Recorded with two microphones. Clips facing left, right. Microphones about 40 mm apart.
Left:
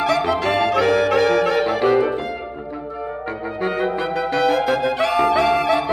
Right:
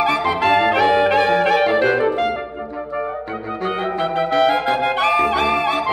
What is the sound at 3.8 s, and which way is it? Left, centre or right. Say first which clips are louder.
Clarinet: right 1 dB; right.